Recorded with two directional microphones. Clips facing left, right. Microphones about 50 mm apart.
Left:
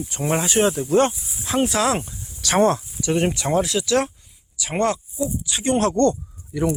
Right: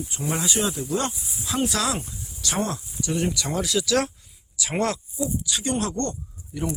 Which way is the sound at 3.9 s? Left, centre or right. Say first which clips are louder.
Left 1 dB; centre.